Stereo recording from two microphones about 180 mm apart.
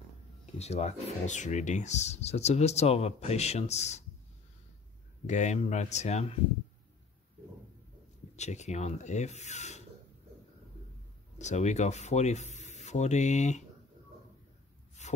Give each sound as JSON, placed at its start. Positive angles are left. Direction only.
{"t": 0.6, "sound": "speech", "side_deg": 35}
{"t": 5.2, "sound": "speech", "side_deg": 40}
{"t": 8.4, "sound": "speech", "side_deg": 40}
{"t": 11.3, "sound": "speech", "side_deg": 40}
{"t": 15.0, "sound": "a sound", "side_deg": 40}